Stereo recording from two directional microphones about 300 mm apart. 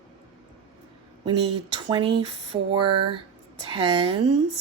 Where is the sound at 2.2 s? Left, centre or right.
Centre.